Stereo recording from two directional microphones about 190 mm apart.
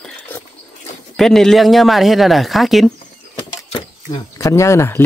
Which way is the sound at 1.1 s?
Centre (ahead or behind).